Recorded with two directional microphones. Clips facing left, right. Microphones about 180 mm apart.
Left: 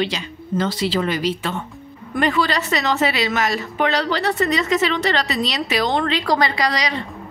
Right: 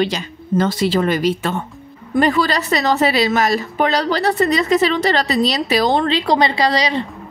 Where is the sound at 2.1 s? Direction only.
35° right (ahead or behind).